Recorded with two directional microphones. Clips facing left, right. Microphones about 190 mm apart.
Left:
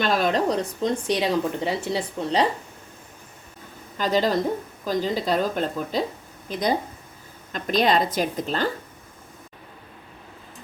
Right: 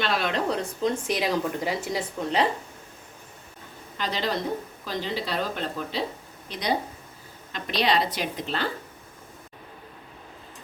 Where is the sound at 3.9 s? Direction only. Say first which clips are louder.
Left 7 dB; 45° left (ahead or behind).